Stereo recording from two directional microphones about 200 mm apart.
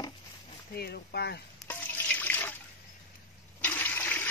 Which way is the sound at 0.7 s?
55° left (ahead or behind).